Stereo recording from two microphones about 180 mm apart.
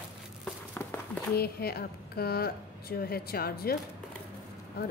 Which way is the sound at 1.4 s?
60° left (ahead or behind).